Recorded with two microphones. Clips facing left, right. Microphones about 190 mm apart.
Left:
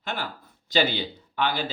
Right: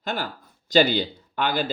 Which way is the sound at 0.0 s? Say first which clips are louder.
Right 3 dB; 40° right (ahead or behind).